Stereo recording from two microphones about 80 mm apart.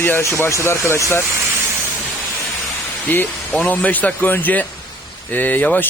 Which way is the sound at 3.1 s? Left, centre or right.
Left.